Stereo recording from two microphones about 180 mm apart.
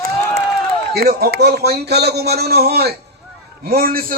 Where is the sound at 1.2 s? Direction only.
65° right (ahead or behind).